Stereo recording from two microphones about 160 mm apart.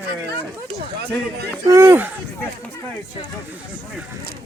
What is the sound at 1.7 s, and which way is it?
Speech, 15° right (ahead or behind).